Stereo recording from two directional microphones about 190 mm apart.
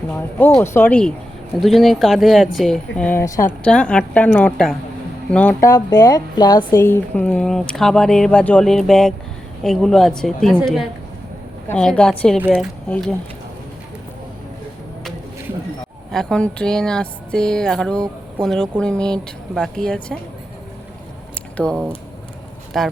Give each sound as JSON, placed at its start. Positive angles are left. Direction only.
{"t": 0.1, "sound": "a woman's voice", "side_deg": 10}
{"t": 6.8, "sound": "speech", "side_deg": 10}
{"t": 11.8, "sound": "speech", "side_deg": 5}
{"t": 16.1, "sound": "speech", "side_deg": 5}
{"t": 21.5, "sound": "speech", "side_deg": 5}